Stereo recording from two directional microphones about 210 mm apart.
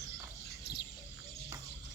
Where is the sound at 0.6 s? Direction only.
50° left (ahead or behind).